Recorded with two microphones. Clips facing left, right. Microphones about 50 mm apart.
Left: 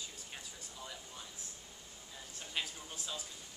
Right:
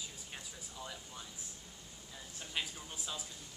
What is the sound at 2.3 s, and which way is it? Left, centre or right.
Speech, centre.